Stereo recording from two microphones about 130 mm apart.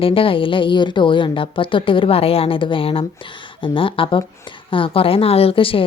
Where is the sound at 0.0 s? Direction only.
45° left (ahead or behind).